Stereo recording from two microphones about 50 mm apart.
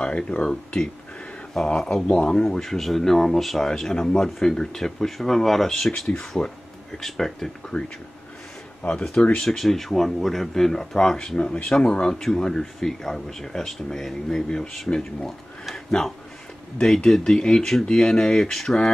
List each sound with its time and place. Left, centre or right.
0.0 s speech: left
6.4 s speech: left
7.0 s speech: centre
8.8 s speech: left
9.2 s speech: centre
9.6 s speech: centre